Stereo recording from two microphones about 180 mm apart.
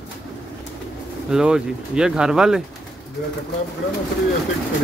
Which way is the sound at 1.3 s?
5° right (ahead or behind).